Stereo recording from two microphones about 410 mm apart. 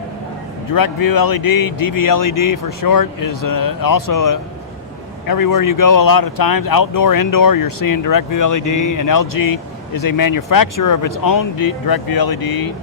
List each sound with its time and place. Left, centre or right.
0.7 s speech: left